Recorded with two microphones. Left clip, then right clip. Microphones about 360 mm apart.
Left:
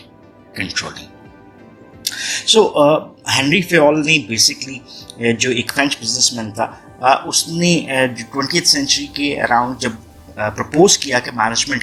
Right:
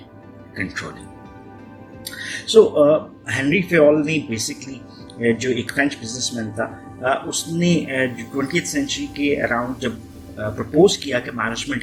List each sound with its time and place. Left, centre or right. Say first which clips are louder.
0.5 s speech: left 5 dB; centre
2.0 s speech: left 10 dB; centre